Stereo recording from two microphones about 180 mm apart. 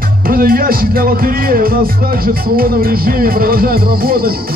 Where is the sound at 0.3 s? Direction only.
55° right (ahead or behind).